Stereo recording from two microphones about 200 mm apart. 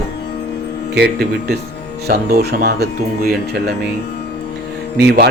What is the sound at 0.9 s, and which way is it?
Speech, 55° right (ahead or behind).